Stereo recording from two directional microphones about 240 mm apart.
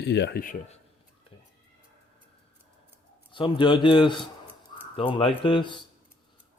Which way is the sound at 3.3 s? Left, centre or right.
Centre.